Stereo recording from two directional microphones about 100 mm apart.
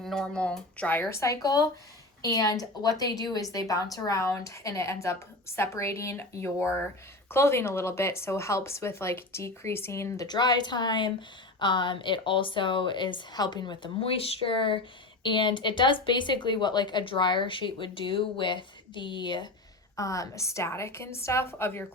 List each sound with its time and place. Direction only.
0.0 s speech: 5° left (ahead or behind)
1.2 s a woman's voice: 35° left (ahead or behind)
10.2 s speech: 45° left (ahead or behind)
14.0 s speech: 60° left (ahead or behind)
20.0 s speech: 35° left (ahead or behind)